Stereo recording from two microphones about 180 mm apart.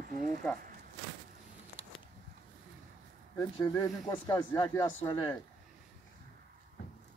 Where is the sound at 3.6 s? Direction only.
20° left (ahead or behind).